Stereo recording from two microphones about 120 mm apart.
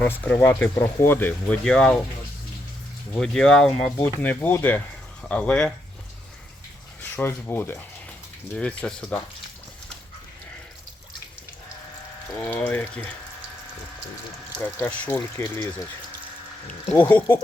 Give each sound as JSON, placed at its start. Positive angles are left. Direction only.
{"t": 0.0, "sound": "speech", "side_deg": 15}
{"t": 3.2, "sound": "speech", "side_deg": 5}
{"t": 7.2, "sound": "speech", "side_deg": 20}
{"t": 12.4, "sound": "speech", "side_deg": 15}
{"t": 14.5, "sound": "speech", "side_deg": 15}
{"t": 16.9, "sound": "speech", "side_deg": 15}